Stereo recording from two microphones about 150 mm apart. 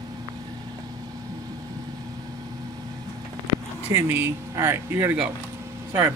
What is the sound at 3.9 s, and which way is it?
Speech, 15° right (ahead or behind).